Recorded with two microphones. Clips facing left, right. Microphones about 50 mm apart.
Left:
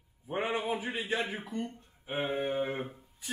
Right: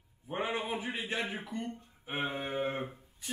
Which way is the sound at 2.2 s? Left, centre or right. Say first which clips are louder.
Left 4 dB; right.